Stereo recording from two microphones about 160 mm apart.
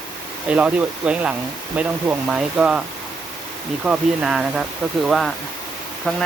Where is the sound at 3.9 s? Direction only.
5° right (ahead or behind).